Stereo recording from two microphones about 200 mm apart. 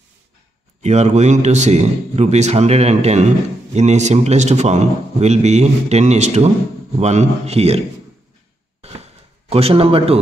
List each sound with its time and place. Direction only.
0.8 s a man's voice: 35° right (ahead or behind)
9.5 s a man's voice: 30° right (ahead or behind)